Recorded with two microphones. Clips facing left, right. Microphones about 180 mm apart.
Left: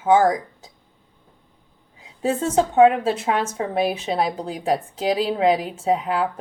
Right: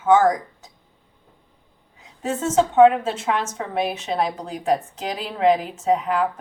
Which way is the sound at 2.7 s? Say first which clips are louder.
Right 1 dB; 35° left (ahead or behind).